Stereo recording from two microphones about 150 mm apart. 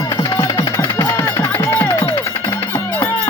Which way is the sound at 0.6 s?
20° left (ahead or behind).